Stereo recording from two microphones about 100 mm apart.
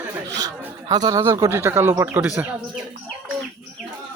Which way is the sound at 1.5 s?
25° right (ahead or behind).